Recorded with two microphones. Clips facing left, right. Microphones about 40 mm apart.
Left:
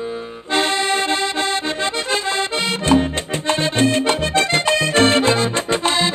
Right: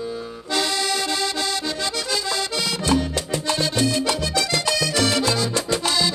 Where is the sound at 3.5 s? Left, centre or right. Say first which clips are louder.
Left 5 dB; left.